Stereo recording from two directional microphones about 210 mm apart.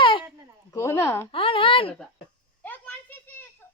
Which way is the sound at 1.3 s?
25° left (ahead or behind).